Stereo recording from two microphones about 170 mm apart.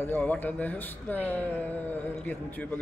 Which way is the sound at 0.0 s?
10° left (ahead or behind).